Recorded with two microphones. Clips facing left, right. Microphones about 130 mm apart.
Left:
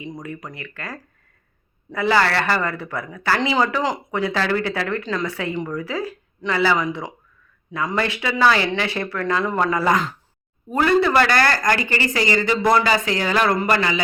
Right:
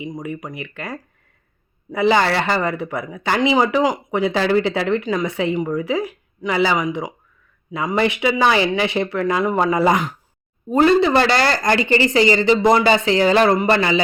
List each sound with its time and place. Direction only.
0.0 s speech: 15° right (ahead or behind)